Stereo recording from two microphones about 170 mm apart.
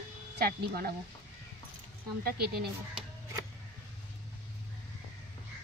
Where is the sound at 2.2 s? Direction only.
65° right (ahead or behind).